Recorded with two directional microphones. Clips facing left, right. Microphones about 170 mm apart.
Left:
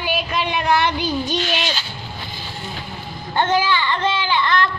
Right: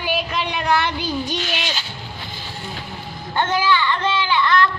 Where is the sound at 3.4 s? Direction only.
30° left (ahead or behind).